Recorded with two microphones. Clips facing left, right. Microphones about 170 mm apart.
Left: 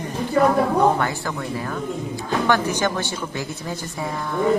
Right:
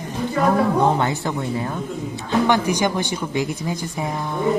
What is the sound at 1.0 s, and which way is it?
Speech, 20° right (ahead or behind).